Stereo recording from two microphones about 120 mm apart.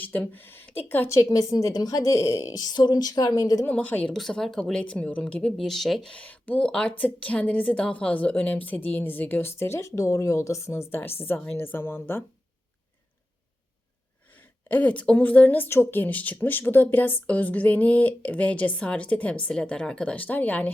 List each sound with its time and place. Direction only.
0.0 s a woman's voice: 15° left (ahead or behind); by 3.7 s 30° left (ahead or behind)
3.7 s speech: 15° left (ahead or behind)
14.7 s speech: 10° left (ahead or behind)